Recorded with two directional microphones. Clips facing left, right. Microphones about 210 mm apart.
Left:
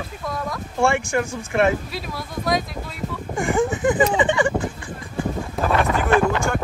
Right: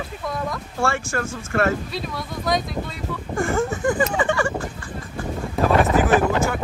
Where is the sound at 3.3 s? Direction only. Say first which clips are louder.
Left 1 dB; 15° left (ahead or behind).